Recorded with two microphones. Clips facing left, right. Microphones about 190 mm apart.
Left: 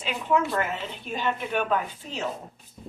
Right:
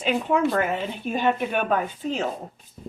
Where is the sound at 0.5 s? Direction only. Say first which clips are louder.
Right 4 dB; 55° right (ahead or behind).